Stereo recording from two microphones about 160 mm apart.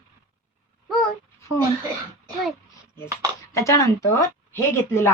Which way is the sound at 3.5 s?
20° left (ahead or behind).